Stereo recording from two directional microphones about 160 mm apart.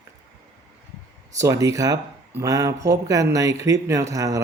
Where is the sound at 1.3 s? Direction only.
20° right (ahead or behind).